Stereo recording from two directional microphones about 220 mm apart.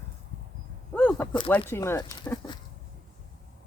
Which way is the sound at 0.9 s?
10° left (ahead or behind).